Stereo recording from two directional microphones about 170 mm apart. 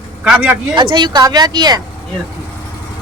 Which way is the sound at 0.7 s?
25° right (ahead or behind).